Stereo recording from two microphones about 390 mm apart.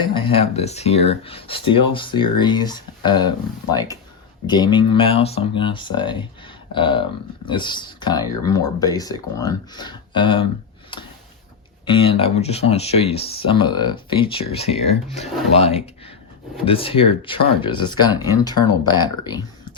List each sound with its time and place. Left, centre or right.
0.0 s speech: centre
11.9 s speech: centre